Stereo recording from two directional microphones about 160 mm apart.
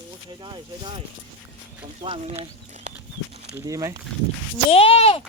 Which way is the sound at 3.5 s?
20° right (ahead or behind).